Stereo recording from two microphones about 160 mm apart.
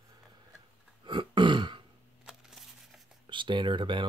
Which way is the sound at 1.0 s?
30° right (ahead or behind).